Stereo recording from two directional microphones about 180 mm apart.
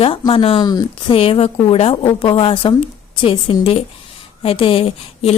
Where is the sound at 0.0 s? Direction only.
30° left (ahead or behind).